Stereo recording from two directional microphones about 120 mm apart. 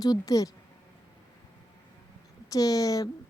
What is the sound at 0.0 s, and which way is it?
Speech, 30° left (ahead or behind).